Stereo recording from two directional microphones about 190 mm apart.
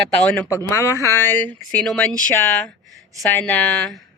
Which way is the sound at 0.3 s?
15° left (ahead or behind).